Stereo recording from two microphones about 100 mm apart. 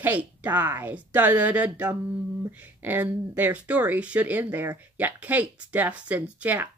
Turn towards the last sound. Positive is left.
turn(degrees=-20)  # may be behind; listen again after turning